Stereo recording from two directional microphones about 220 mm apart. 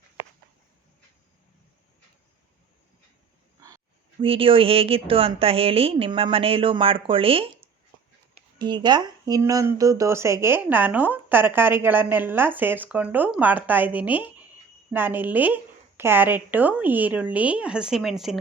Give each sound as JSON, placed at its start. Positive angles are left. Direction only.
{"t": 4.2, "sound": "speech", "side_deg": -25}